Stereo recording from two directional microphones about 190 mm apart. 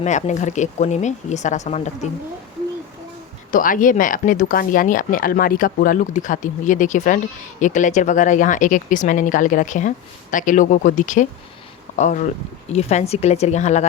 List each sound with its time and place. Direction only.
0.0 s speech: 35° left (ahead or behind)
3.5 s speech: 45° left (ahead or behind)